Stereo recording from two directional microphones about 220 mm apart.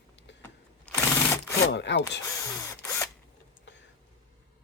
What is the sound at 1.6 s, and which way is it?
Wood, 55° left (ahead or behind).